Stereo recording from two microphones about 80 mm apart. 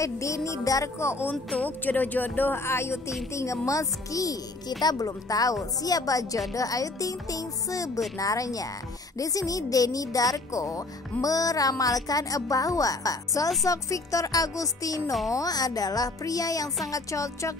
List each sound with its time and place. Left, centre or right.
0.0 s a woman's voice: left
1.6 s a woman's voice: left